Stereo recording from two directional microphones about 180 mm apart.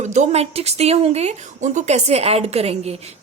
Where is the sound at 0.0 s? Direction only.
40° right (ahead or behind).